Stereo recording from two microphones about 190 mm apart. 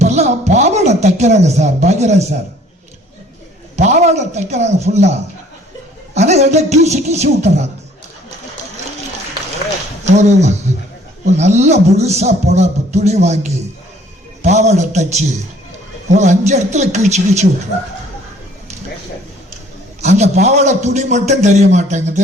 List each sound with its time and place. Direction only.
0.0 s a man's voice: 35° right (ahead or behind)
3.8 s a man's voice: 35° right (ahead or behind)
10.1 s a man's voice: 35° right (ahead or behind)
20.0 s a man's voice: 35° right (ahead or behind)